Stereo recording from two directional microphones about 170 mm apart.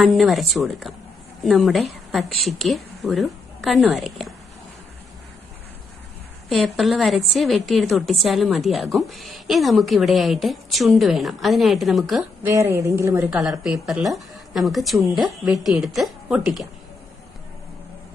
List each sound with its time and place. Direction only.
0.0 s a woman's voice: centre (ahead or behind)
6.5 s a woman's voice: centre (ahead or behind)
12.4 s a woman's voice: 15° right (ahead or behind)
13.3 s a woman's voice: centre (ahead or behind)